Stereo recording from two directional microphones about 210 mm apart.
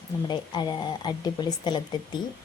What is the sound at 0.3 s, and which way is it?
A woman's voice, 20° left (ahead or behind).